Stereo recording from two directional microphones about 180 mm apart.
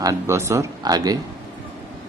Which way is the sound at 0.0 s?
15° right (ahead or behind).